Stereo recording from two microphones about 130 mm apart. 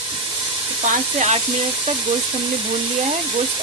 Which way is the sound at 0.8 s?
60° right (ahead or behind).